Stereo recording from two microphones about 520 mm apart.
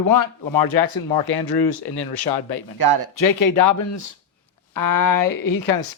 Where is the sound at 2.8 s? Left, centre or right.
Right.